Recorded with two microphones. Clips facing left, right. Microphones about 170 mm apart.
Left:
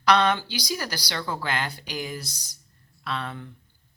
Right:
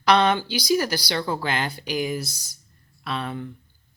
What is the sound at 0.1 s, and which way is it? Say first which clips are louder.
Speech: right 2 dB; 25° right (ahead or behind).